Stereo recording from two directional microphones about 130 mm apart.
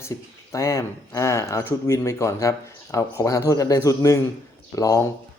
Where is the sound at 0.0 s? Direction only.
25° left (ahead or behind).